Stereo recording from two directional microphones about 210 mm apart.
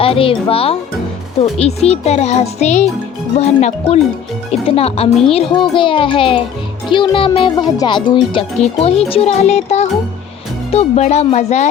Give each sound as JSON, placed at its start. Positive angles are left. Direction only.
{"t": 0.0, "sound": "a child's voice", "side_deg": 25}